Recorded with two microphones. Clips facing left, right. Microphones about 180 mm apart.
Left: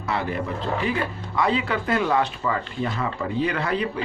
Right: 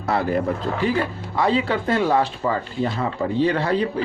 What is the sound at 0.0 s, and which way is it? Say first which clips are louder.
Speech: right 5 dB; 40° right (ahead or behind).